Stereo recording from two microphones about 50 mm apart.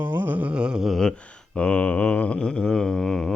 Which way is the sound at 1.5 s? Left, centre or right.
Left.